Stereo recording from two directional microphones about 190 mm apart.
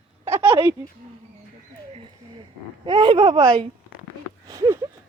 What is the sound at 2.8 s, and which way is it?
Speech, 25° right (ahead or behind).